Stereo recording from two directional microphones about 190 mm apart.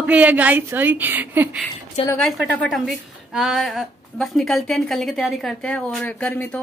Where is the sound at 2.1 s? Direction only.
Centre (ahead or behind).